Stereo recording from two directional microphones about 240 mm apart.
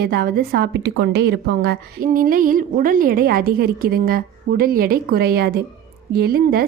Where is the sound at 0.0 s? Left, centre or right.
Right.